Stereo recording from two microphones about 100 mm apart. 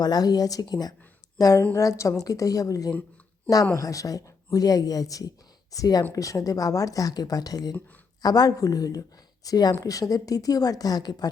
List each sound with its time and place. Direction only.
0.0 s speech: 40° left (ahead or behind)